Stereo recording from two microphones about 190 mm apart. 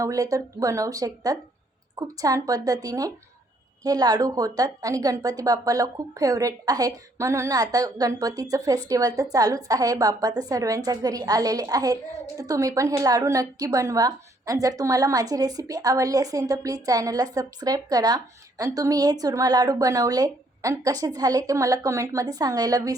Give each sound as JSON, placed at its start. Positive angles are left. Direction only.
{"t": 0.0, "sound": "a woman's voice", "side_deg": -15}